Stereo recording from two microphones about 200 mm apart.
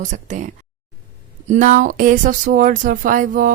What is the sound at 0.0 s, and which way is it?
A woman's voice, 35° right (ahead or behind).